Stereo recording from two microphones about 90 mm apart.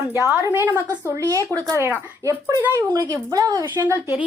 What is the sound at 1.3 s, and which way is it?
Speech, 35° right (ahead or behind).